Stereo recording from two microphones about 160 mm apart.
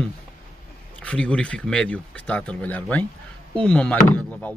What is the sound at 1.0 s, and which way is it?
Speech, 5° left (ahead or behind).